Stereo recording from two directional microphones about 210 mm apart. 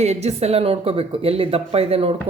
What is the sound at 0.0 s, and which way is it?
Speech, 30° right (ahead or behind).